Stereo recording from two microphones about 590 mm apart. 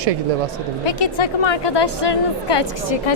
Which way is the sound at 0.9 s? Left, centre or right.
Left.